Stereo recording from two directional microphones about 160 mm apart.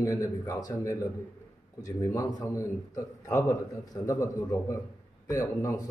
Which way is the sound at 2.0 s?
20° left (ahead or behind).